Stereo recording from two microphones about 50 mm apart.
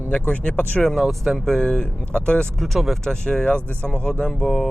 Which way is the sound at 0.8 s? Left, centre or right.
Centre.